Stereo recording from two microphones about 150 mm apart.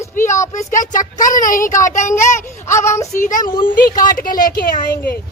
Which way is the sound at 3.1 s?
60° left (ahead or behind).